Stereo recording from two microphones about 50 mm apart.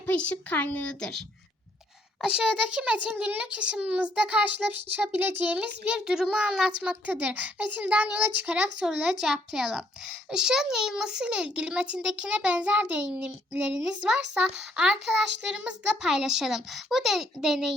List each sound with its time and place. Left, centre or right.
0.1 s speech: left
2.2 s a child's voice: centre; by 5.5 s right
6.1 s a child's voice: centre
7.0 s a child's voice: right
8.5 s a child's voice: centre
9.2 s a child's voice: centre; by 13.6 s right
13.7 s a child's voice: centre